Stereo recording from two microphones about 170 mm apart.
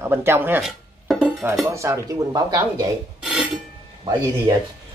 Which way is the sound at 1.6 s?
15° right (ahead or behind).